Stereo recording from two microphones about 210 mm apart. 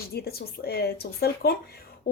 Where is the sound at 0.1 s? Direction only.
50° left (ahead or behind).